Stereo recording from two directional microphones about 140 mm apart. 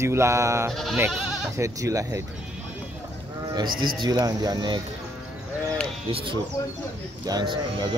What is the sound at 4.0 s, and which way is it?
Speech, 25° right (ahead or behind).